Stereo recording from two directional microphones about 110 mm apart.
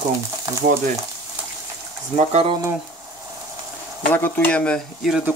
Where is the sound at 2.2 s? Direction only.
85° right.